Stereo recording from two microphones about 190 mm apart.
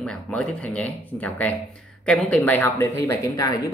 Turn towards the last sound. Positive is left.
turn(degrees=20)  # may be behind; listen again after turning